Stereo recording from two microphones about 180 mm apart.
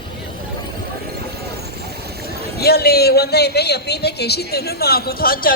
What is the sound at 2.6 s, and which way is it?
A man's voice, 60° left (ahead or behind).